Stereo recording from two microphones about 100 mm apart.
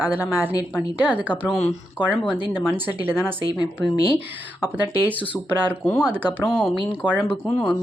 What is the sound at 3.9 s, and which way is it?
Speech, 40° left (ahead or behind).